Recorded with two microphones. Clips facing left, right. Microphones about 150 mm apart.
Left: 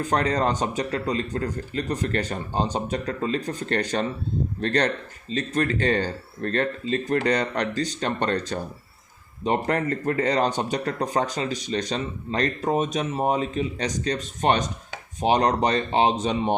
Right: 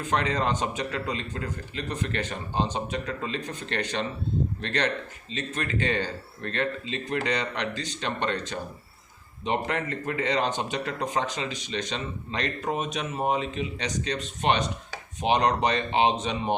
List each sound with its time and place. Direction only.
0.0 s speech: 40° left (ahead or behind)